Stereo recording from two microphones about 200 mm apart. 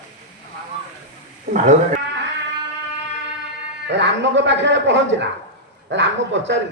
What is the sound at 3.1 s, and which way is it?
A man's voice, 60° right (ahead or behind).